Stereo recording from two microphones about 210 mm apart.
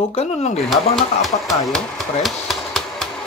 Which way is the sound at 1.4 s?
Centre (ahead or behind).